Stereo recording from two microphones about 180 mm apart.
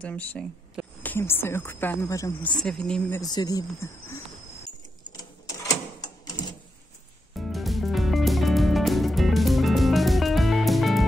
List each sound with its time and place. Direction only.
0.0 s speech: 5° left (ahead or behind)
2.5 s speech: 5° left (ahead or behind)
3.2 s speech: 20° left (ahead or behind)
5.9 s a sound: 20° left (ahead or behind)
7.3 s music: centre (ahead or behind)